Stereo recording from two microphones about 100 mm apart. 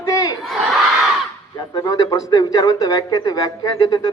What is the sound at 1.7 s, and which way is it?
Speech, 40° left (ahead or behind).